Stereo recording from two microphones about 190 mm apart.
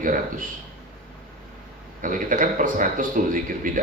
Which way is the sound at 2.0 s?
45° right (ahead or behind).